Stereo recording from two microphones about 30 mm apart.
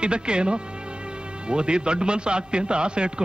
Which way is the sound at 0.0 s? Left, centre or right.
Right.